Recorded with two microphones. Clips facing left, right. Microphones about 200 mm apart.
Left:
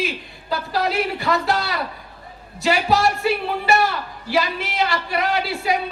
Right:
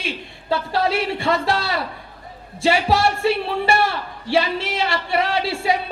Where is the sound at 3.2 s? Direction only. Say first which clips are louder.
Right 2 dB; 30° right (ahead or behind).